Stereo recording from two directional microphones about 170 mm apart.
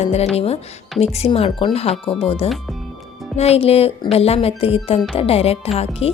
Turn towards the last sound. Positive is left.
turn(degrees=35)  # may be behind; listen again after turning